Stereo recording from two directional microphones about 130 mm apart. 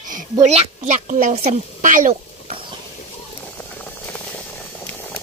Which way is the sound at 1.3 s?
55° right (ahead or behind).